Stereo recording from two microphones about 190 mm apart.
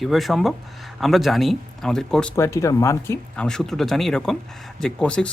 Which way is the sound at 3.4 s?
Centre (ahead or behind).